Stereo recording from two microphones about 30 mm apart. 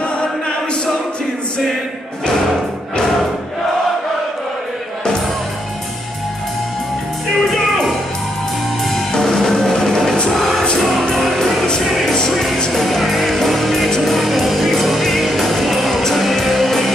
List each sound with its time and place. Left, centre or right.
0.0 s choir: left
7.3 s music: centre
8.8 s music: centre
10.3 s music: centre
12.3 s music: centre
14.1 s music: centre